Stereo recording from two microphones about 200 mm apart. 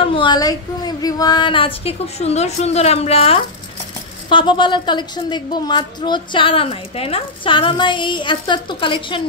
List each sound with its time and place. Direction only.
0.0 s a woman's voice: 25° left (ahead or behind)